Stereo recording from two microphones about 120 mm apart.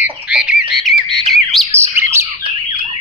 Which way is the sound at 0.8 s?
Centre (ahead or behind).